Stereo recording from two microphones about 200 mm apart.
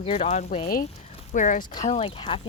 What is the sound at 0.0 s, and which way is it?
Speech, 30° left (ahead or behind).